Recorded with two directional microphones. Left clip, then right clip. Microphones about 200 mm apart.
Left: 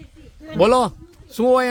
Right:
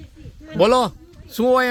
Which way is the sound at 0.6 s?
10° left (ahead or behind).